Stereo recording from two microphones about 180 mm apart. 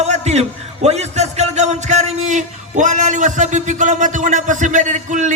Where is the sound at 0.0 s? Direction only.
40° right (ahead or behind).